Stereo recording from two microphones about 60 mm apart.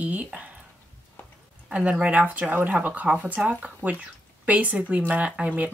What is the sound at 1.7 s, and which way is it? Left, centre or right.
Speech, centre.